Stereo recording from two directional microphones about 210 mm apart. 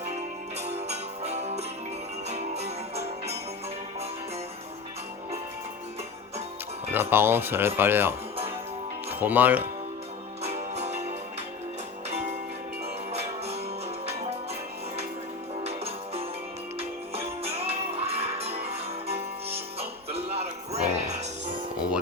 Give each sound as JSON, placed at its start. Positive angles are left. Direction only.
{"t": 0.6, "sound": "music", "side_deg": -30}
{"t": 6.9, "sound": "speech", "side_deg": -10}
{"t": 9.1, "sound": "speech", "side_deg": -10}
{"t": 10.4, "sound": "music", "side_deg": -30}
{"t": 15.6, "sound": "music", "side_deg": -30}